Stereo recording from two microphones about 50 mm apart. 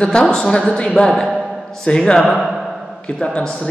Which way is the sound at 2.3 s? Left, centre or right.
Centre.